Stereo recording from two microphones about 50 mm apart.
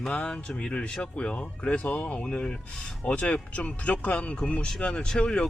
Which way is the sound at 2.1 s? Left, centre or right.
Centre.